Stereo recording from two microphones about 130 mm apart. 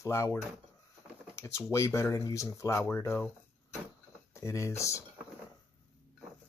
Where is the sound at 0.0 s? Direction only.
20° left (ahead or behind).